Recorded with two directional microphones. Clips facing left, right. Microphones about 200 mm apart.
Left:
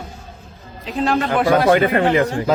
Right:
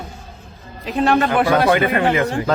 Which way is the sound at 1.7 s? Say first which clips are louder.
Left 2 dB; 40° left (ahead or behind).